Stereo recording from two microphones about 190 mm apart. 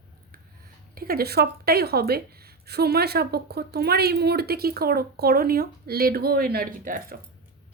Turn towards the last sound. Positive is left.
turn(degrees=-45)  # may be behind; listen again after turning